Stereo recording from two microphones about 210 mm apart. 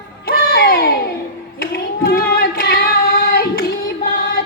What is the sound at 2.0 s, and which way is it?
Hands, 45° left (ahead or behind).